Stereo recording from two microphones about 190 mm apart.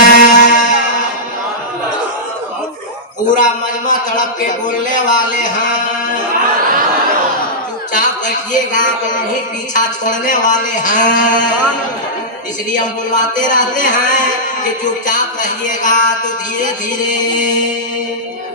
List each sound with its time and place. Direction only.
0.0 s music: 40° left (ahead or behind)
3.2 s speech: 40° left (ahead or behind)
7.9 s a man's voice: 45° left (ahead or behind)
12.7 s a man's voice: 40° left (ahead or behind)